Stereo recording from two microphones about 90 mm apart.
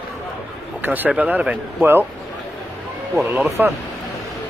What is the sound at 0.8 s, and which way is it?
Speech, 20° right (ahead or behind).